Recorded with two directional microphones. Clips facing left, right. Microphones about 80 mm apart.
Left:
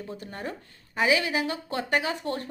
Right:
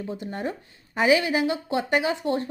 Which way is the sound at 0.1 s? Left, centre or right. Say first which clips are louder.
Right 6 dB; centre.